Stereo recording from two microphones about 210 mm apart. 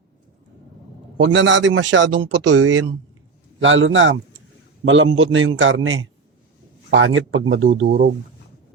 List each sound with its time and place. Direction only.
1.2 s a man's voice: 60° right (ahead or behind)